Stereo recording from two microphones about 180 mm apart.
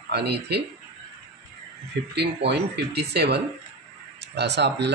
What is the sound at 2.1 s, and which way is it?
Speech, 70° right (ahead or behind).